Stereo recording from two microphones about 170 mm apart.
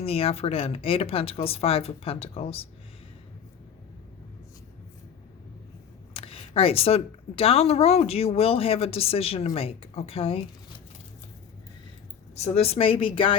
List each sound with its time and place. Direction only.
0.0 s speech: 35° left (ahead or behind)
6.1 s speech: 35° left (ahead or behind)
12.5 s speech: 35° left (ahead or behind)